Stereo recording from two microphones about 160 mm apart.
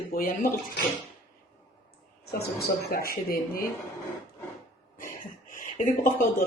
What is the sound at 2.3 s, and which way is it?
Speech, 75° left (ahead or behind).